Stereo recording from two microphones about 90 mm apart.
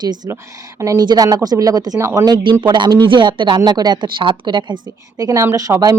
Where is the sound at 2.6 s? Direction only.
55° right (ahead or behind).